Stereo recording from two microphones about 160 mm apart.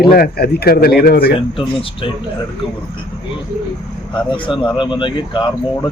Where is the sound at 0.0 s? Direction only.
70° left (ahead or behind).